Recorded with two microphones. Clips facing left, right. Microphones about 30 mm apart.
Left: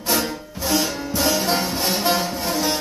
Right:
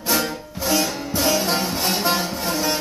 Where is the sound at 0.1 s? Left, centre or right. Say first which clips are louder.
Even; centre.